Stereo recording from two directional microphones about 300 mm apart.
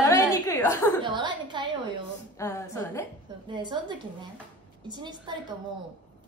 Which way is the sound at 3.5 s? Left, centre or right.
Centre.